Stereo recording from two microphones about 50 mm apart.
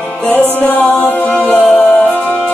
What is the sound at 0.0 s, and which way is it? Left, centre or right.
Music, left.